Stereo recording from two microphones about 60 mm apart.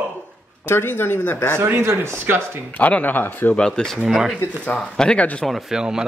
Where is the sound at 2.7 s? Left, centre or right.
Left.